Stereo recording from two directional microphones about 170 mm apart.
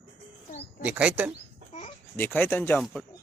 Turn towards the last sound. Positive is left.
turn(degrees=5)  # may be behind; listen again after turning